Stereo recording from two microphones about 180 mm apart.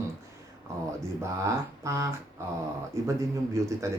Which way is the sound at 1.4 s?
15° right (ahead or behind).